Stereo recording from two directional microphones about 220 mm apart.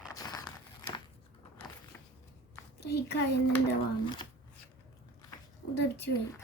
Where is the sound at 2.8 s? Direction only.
45° left (ahead or behind).